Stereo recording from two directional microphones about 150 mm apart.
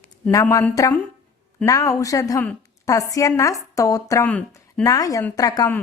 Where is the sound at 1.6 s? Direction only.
20° left (ahead or behind).